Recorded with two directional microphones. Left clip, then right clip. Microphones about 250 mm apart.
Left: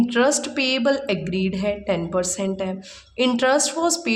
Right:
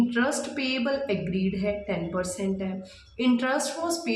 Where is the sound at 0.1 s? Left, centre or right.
Left.